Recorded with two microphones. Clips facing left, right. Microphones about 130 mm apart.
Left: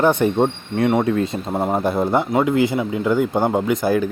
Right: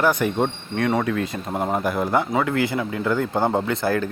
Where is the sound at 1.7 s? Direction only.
25° left (ahead or behind).